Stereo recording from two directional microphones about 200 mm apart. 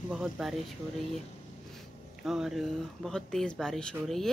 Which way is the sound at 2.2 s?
Centre (ahead or behind).